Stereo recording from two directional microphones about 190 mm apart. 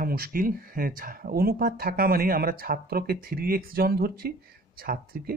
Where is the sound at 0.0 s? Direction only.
50° right (ahead or behind).